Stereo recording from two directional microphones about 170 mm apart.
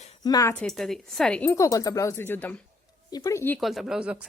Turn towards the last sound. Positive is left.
turn(degrees=-5)  # may be behind; listen again after turning